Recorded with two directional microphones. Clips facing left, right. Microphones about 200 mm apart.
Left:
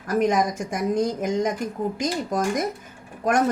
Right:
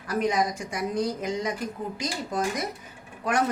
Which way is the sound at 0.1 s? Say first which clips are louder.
Left 4 dB; 45° left (ahead or behind).